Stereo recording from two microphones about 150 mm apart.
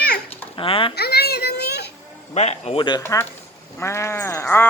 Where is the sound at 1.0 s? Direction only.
90° left.